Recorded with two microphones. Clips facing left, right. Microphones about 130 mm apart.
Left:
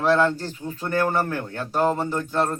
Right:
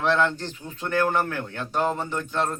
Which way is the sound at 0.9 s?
35° left (ahead or behind).